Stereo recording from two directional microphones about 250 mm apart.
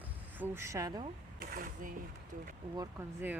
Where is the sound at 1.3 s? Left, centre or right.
Right.